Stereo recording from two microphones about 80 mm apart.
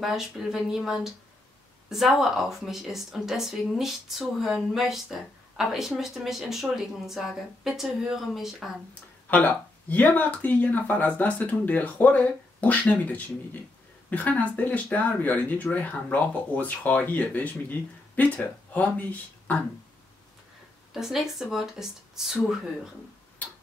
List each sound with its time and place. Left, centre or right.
0.0 s a woman's voice: centre
9.3 s speech: centre
20.9 s a woman's voice: centre